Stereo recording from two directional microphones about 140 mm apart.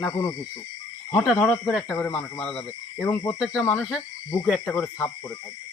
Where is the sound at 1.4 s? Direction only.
10° left (ahead or behind).